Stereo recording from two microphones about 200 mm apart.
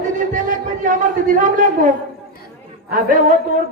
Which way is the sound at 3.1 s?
40° right (ahead or behind).